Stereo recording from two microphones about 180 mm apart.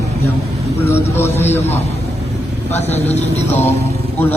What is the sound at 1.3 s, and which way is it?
Speech, 35° left (ahead or behind).